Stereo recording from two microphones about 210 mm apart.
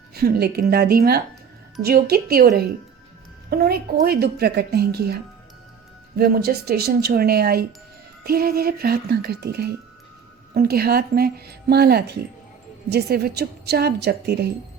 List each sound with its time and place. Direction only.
0.1 s speech: 50° right (ahead or behind)